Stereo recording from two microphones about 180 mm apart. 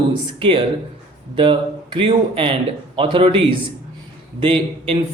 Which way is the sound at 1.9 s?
30° right (ahead or behind).